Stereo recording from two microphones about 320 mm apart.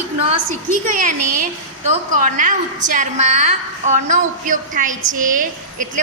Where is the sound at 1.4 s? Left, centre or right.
Right.